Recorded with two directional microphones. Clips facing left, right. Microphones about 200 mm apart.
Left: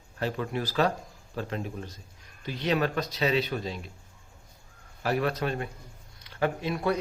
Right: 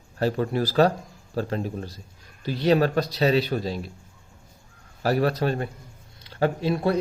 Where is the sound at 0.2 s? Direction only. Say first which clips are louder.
Right 7 dB; 35° right (ahead or behind).